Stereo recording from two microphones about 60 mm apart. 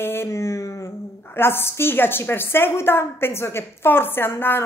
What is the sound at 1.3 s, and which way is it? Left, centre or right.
A woman's voice, left.